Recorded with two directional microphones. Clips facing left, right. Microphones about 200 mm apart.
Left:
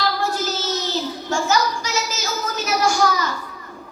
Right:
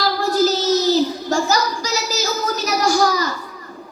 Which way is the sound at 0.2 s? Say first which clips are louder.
Right 7 dB; 35° right (ahead or behind).